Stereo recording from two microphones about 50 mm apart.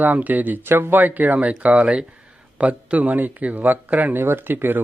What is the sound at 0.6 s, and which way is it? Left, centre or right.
Speech, right.